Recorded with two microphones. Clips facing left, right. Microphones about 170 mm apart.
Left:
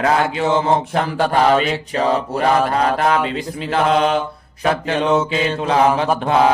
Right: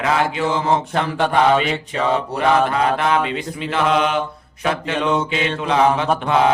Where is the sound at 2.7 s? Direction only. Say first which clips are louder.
Left 1 dB; 40° left (ahead or behind).